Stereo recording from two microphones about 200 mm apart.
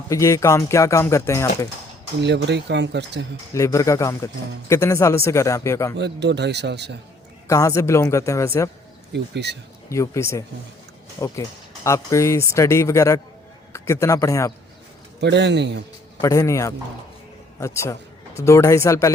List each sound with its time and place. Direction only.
0.1 s speech: 15° left (ahead or behind)
2.2 s speech: 60° right (ahead or behind)
3.5 s speech: 15° left (ahead or behind)
6.0 s speech: 60° right (ahead or behind)
7.4 s speech: 15° left (ahead or behind)
9.1 s speech: 60° right (ahead or behind)
9.9 s a man's voice: 15° left (ahead or behind)
15.2 s speech: 60° right (ahead or behind)
16.2 s speech: 15° left (ahead or behind)